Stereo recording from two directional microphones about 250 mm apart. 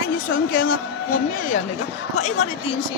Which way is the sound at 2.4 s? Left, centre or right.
Left.